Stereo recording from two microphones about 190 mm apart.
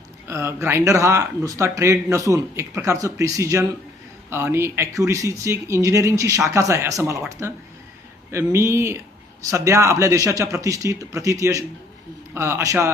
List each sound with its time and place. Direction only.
0.3 s speech: 15° right (ahead or behind)